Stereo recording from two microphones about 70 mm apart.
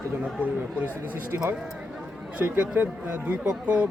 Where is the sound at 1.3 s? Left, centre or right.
Right.